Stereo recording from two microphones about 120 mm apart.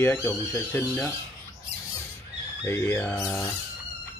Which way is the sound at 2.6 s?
20° left (ahead or behind).